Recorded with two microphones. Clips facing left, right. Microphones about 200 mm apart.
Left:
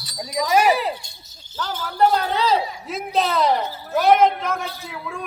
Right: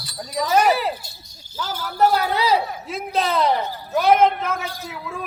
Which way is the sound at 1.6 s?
10° right (ahead or behind).